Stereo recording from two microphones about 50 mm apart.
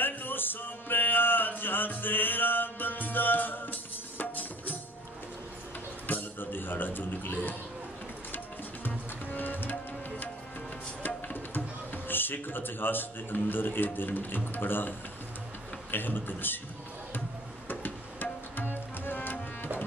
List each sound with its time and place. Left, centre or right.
0.0 s music: left
6.0 s music: left
8.8 s music: left
11.0 s a man's voice: left
17.6 s music: left